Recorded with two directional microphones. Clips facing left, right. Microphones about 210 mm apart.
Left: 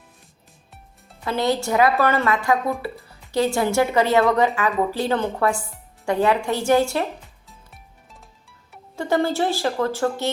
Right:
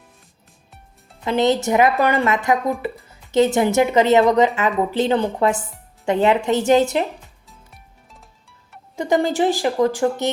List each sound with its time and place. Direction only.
1.2 s a woman's voice: 20° right (ahead or behind)
7.4 s music: centre (ahead or behind)
9.0 s a woman's voice: 15° right (ahead or behind)